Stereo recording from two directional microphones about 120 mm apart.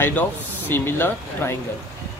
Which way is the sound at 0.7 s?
20° left (ahead or behind).